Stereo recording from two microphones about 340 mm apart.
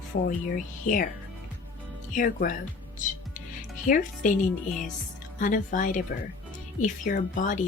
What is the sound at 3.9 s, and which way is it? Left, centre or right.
Speech, left.